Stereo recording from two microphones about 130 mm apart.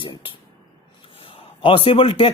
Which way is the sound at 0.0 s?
40° left (ahead or behind).